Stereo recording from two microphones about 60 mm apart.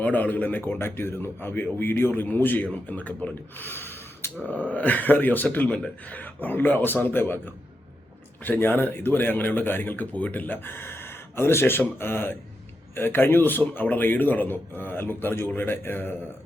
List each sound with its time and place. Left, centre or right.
0.0 s speech: left